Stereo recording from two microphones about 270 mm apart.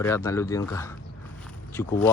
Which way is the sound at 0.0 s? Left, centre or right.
Centre.